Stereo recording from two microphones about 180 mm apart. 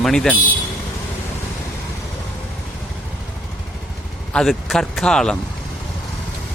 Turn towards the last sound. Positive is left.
turn(degrees=5)  # may be behind; listen again after turning